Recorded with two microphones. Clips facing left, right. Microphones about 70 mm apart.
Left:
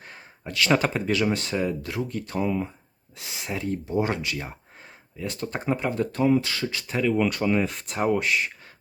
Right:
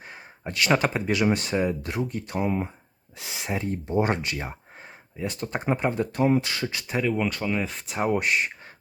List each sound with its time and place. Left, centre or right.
0.4 s speech: right
0.7 s speech: centre
7.0 s speech: centre
7.3 s speech: centre
8.2 s speech: right